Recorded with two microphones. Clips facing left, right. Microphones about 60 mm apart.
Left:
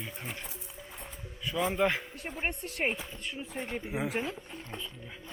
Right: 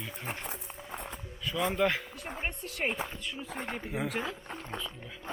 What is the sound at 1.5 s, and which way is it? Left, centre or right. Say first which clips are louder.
Speech: even; centre.